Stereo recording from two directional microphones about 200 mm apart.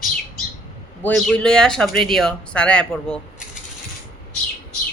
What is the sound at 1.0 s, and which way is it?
A woman's voice, 5° left (ahead or behind).